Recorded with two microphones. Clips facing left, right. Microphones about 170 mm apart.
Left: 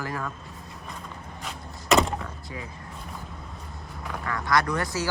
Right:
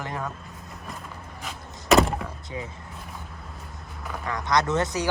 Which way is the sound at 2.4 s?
20° right (ahead or behind).